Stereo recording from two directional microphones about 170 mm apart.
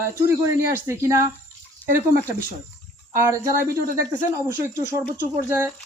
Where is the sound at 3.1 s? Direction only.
15° right (ahead or behind).